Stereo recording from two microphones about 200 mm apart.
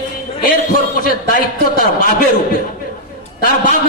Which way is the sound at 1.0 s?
45° left (ahead or behind).